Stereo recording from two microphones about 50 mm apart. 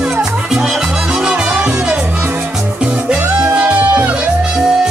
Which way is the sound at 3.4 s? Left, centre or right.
Right.